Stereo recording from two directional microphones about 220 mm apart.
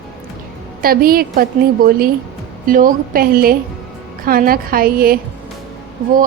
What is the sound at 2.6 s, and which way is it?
A woman's voice, 40° right (ahead or behind).